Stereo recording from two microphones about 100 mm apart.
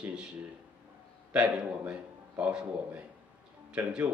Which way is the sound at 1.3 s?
10° right (ahead or behind).